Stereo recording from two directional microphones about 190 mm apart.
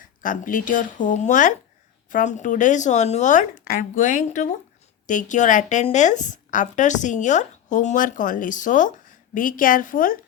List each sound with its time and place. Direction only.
0.0 s a woman's voice: 45° left (ahead or behind)